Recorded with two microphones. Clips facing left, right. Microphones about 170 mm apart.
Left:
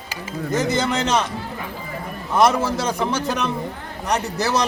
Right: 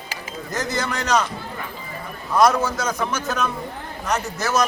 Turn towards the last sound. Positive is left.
turn(degrees=35)  # may be behind; listen again after turning